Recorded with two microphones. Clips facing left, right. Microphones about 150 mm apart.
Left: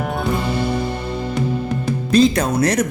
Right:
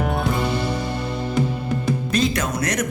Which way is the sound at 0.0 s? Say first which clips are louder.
Even; centre (ahead or behind).